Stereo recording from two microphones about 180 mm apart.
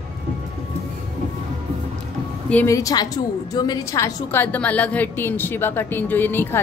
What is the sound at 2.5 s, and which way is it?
A woman's voice, 15° left (ahead or behind).